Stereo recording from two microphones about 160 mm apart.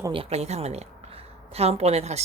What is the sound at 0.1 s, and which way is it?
A woman's voice, 40° right (ahead or behind).